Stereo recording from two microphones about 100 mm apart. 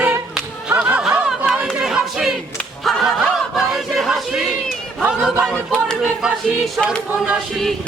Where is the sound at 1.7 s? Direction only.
10° right (ahead or behind).